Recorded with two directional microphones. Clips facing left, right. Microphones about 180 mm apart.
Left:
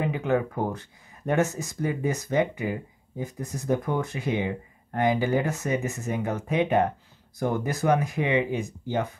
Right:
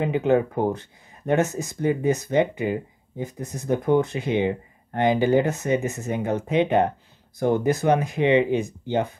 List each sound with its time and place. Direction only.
0.1 s speech: 25° right (ahead or behind)